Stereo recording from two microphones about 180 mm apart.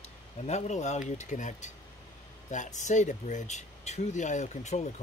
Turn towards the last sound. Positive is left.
turn(degrees=40)  # may be behind; listen again after turning